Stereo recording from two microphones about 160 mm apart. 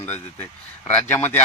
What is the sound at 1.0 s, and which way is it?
Speech, 15° left (ahead or behind).